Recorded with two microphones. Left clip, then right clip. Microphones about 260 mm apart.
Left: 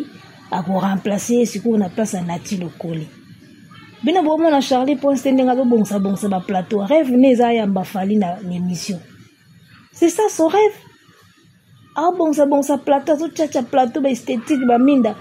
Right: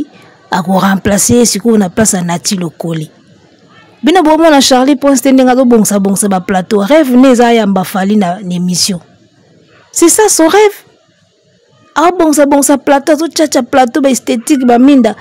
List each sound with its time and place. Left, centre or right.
0.5 s a woman's voice: right
4.0 s a woman's voice: right
9.9 s a woman's voice: right
11.9 s a woman's voice: right